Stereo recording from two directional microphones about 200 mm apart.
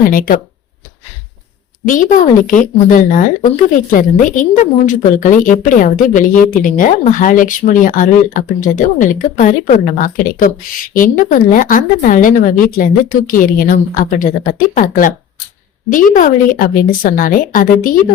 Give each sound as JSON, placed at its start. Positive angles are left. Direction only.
{"t": 0.1, "sound": "speech", "side_deg": 45}
{"t": 1.9, "sound": "a woman's voice", "side_deg": 40}